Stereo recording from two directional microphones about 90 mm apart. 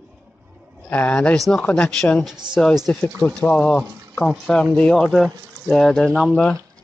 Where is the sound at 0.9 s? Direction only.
15° left (ahead or behind).